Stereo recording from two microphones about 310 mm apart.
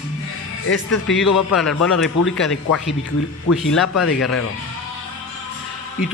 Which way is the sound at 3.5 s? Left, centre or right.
Left.